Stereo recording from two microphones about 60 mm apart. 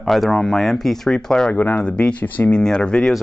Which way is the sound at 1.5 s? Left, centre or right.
Left.